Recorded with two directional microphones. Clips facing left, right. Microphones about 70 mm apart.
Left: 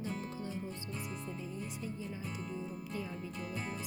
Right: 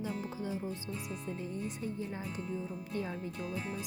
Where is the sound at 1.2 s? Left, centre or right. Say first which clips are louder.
Right 4 dB; right.